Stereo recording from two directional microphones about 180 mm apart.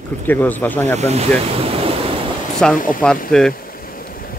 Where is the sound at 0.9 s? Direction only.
35° right (ahead or behind).